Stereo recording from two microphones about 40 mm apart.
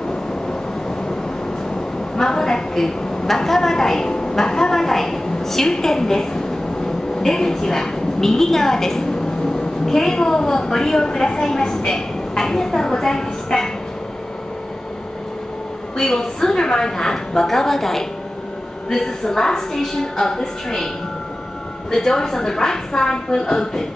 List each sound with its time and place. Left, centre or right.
2.1 s a woman's voice: centre
16.0 s a woman's voice: centre
21.9 s a woman's voice: centre